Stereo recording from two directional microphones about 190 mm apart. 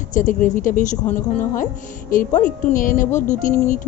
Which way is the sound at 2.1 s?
45° left (ahead or behind).